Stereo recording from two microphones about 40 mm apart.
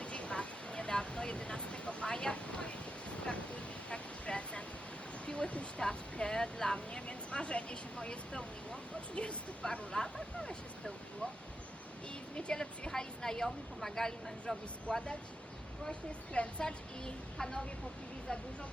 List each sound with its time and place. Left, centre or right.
0.0 s vehicle: left
12.4 s speech: left
14.8 s a woman's voice: left
17.3 s speech: centre
18.3 s a woman's voice: left